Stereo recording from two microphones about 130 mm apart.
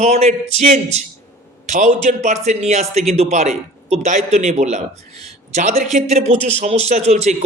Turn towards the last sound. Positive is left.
turn(degrees=-60)  # may be behind; listen again after turning